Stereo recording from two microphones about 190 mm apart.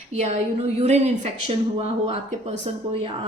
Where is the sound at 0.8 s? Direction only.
35° right (ahead or behind).